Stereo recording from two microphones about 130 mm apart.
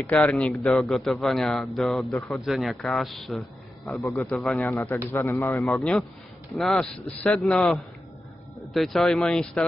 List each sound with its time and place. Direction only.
0.1 s a man's voice: 5° left (ahead or behind)
4.7 s a man's voice: 20° left (ahead or behind)
5.7 s a man's voice: centre (ahead or behind)